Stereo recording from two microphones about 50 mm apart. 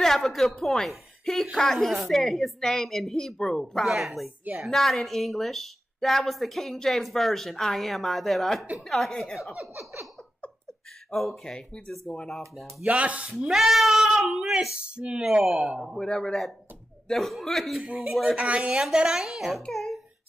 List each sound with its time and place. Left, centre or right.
0.0 s a woman's voice: centre
3.3 s a man's voice: centre
3.8 s a woman's voice: centre
11.1 s a man's voice: centre
12.8 s chopping: right
13.5 s a woman's voice: centre
14.9 s chopping: centre
15.2 s speech: centre
16.0 s a man's voice: centre
17.7 s chopping: right
18.7 s speech: centre
19.7 s a sound: centre